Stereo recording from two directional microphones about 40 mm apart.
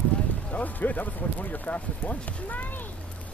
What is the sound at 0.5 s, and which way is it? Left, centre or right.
Speech, left.